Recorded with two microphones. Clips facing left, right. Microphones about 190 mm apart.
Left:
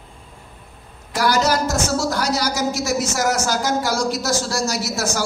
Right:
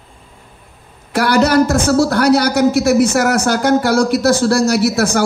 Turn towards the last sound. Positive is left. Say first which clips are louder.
# right 9 dB
turn(degrees=-60)  # may be behind; listen again after turning